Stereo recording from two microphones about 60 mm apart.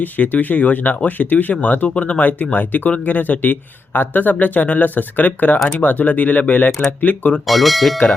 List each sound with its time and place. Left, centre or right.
0.0 s speech: left
7.4 s speech: centre